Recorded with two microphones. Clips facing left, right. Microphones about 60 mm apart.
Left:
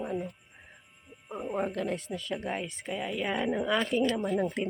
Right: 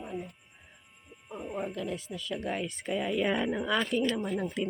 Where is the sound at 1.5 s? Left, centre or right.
Left.